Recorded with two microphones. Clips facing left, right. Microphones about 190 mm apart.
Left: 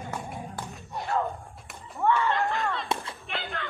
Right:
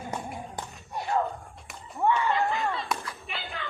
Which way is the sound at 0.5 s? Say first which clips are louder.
Even; 15° right (ahead or behind).